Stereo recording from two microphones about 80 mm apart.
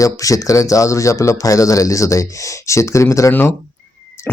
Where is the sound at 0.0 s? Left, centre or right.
Left.